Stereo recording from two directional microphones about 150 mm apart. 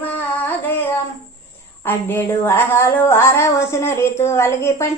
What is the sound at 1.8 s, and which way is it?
Speech, 15° left (ahead or behind).